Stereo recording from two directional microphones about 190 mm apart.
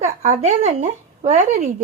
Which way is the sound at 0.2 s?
35° right (ahead or behind).